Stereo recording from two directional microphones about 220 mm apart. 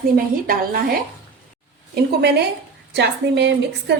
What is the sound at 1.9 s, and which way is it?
A woman's voice, 50° right (ahead or behind).